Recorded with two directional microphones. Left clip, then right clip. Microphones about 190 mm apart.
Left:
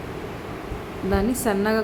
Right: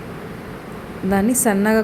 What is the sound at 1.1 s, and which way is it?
Speech, 15° right (ahead or behind).